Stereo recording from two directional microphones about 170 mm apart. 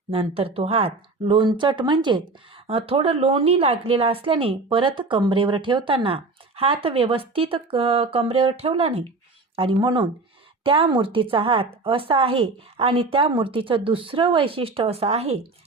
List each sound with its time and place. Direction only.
0.1 s a woman's voice: 35° right (ahead or behind)